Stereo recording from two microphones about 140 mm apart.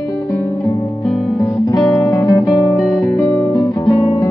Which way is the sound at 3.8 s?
35° left (ahead or behind).